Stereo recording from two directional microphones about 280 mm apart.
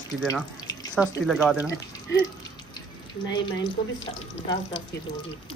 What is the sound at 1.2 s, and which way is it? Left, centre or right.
Speech, centre.